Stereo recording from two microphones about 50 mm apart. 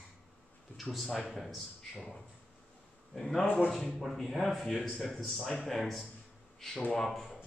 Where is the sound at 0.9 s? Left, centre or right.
Centre.